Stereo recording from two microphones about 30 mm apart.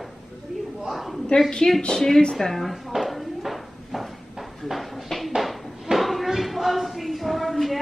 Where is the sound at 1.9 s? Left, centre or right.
Centre.